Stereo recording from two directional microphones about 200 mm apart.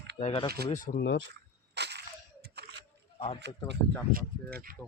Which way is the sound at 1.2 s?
60° right (ahead or behind).